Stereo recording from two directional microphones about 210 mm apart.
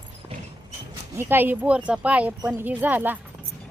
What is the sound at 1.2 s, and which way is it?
Speech, 10° right (ahead or behind).